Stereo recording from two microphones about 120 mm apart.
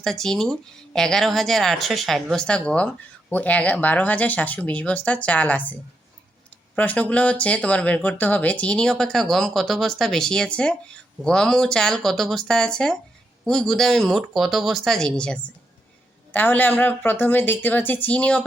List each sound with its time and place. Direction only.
0.0 s speech: 5° left (ahead or behind)
6.7 s speech: 10° left (ahead or behind)